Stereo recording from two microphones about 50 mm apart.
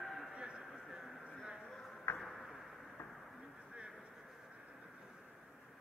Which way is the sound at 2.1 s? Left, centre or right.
Centre.